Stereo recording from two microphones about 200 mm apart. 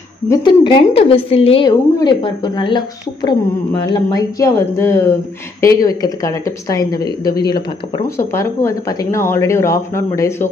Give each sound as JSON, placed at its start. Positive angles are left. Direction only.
{"t": 0.3, "sound": "a woman's voice", "side_deg": 20}
{"t": 8.2, "sound": "speech", "side_deg": 15}